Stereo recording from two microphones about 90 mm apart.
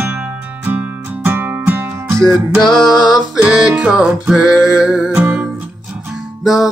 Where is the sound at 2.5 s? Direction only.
5° left (ahead or behind).